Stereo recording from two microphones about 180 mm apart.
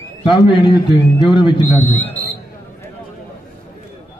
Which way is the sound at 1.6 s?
40° left (ahead or behind).